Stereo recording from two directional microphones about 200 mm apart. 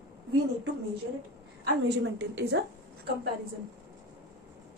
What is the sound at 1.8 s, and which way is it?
Speech, 55° right (ahead or behind).